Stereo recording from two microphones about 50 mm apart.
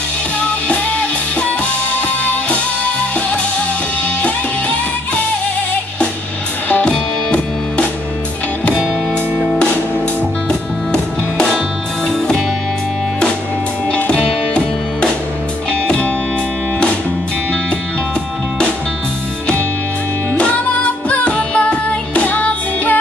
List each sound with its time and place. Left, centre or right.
0.4 s music: left
6.9 s music: left
13.9 s music: left
20.3 s music: left